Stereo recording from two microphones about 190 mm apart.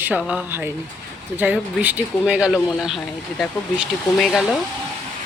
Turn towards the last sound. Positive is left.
turn(degrees=0)  # may be behind; listen again after turning